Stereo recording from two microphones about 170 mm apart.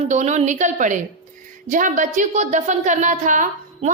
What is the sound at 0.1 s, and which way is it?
A woman's voice, 45° right (ahead or behind).